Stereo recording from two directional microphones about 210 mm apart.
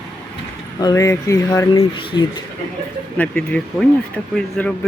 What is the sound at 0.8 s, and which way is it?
Speech, 15° left (ahead or behind).